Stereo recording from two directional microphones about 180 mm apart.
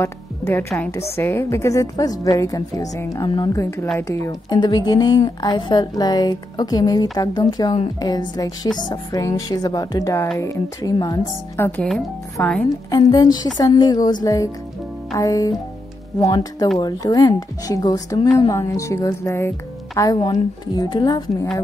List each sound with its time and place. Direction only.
0.0 s a woman's voice: 15° left (ahead or behind)
12.9 s a woman's voice: 20° left (ahead or behind)